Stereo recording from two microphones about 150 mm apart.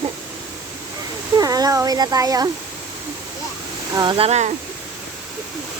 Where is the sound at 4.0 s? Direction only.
35° right (ahead or behind).